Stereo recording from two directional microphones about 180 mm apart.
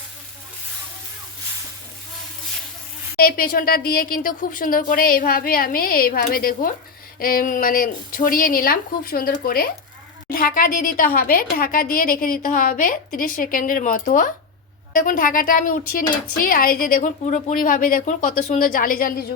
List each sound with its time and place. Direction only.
3.2 s a woman's voice: 55° left (ahead or behind)